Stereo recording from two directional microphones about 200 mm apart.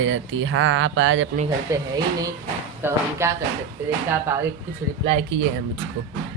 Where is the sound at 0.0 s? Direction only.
70° right (ahead or behind).